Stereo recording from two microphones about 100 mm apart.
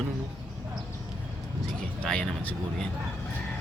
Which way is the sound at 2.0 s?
10° left (ahead or behind).